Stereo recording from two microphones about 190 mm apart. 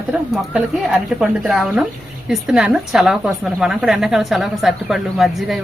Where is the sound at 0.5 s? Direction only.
5° right (ahead or behind).